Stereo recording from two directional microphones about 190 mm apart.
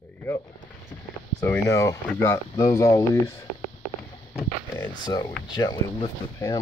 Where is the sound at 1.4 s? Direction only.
15° left (ahead or behind).